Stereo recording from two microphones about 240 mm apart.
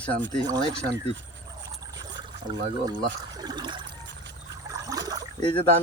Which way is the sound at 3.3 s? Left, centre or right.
Centre.